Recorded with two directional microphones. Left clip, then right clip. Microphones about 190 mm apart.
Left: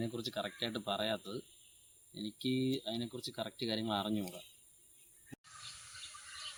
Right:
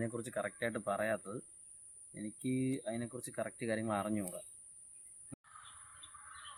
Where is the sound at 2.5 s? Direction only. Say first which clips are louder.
Left 1 dB; 10° right (ahead or behind).